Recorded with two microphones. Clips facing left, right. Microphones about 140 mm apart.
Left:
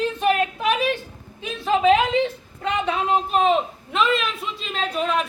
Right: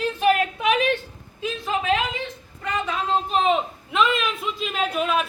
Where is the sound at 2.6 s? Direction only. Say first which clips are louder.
Left 3 dB; 25° left (ahead or behind).